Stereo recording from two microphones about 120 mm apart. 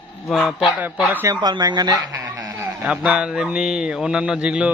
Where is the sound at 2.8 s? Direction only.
5° right (ahead or behind).